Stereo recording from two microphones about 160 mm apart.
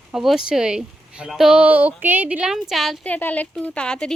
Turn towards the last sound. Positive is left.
turn(degrees=5)  # may be behind; listen again after turning